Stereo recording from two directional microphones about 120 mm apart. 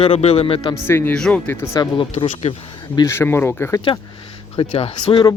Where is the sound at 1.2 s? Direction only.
10° left (ahead or behind).